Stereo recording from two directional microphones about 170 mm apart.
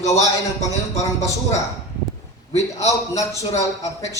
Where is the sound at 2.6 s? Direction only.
20° left (ahead or behind).